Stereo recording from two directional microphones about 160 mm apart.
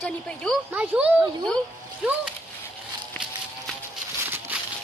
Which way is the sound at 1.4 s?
5° left (ahead or behind).